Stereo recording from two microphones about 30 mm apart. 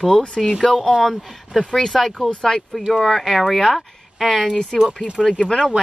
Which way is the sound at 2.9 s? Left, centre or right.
Centre.